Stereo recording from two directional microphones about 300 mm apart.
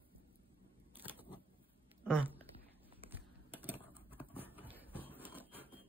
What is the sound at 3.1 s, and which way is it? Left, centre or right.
Typing, centre.